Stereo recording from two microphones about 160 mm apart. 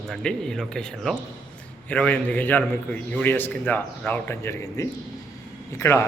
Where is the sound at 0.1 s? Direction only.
5° left (ahead or behind).